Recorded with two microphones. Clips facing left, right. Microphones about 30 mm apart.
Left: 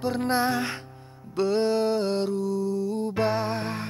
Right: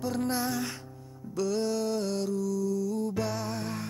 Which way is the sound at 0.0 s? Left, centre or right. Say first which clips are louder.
Left 5 dB; left.